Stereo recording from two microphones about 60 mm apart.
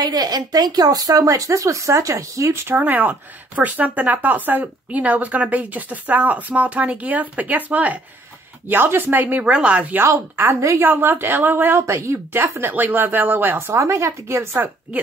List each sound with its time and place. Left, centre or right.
0.1 s speech: right
2.7 s speech: right
9.4 s speech: centre
10.3 s speech: right
11.8 s speech: right
12.3 s speech: right
13.7 s speech: right